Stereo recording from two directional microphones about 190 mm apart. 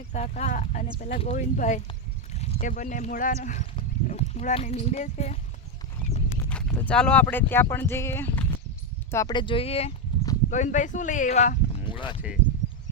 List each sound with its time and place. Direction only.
0.1 s speech: 35° left (ahead or behind)
6.3 s speech: 5° left (ahead or behind); by 12.2 s 25° left (ahead or behind)